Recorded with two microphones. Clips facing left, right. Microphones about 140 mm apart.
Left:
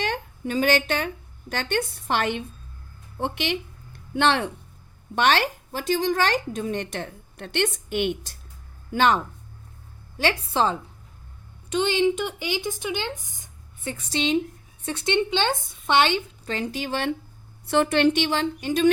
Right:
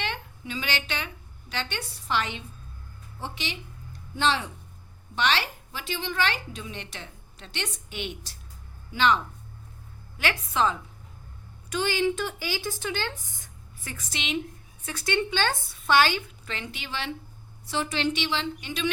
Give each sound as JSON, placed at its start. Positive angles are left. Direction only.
{"t": 0.0, "sound": "a woman's voice", "side_deg": 45}
{"t": 5.1, "sound": "speech", "side_deg": 50}
{"t": 10.2, "sound": "a woman's voice", "side_deg": 30}
{"t": 11.7, "sound": "a woman's voice", "side_deg": 20}
{"t": 16.5, "sound": "a woman's voice", "side_deg": 40}